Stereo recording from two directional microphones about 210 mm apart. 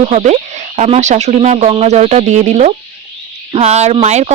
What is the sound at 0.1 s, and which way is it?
Speech, 35° right (ahead or behind).